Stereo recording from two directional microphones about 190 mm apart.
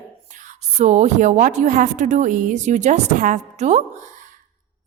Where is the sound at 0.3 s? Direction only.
40° right (ahead or behind).